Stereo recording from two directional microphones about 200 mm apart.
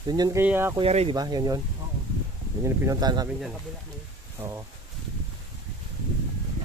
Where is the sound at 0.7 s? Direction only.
30° right (ahead or behind).